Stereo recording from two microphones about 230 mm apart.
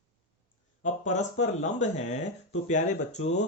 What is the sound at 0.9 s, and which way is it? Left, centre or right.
Speech, left.